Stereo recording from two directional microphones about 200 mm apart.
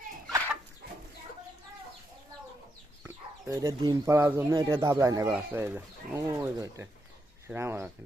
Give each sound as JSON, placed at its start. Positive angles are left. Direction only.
{"t": 3.0, "sound": "speech", "side_deg": -10}